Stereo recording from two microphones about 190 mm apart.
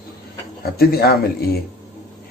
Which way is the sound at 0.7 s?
55° left (ahead or behind).